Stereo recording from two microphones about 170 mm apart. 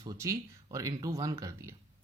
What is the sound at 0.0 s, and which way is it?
Speech, 20° right (ahead or behind).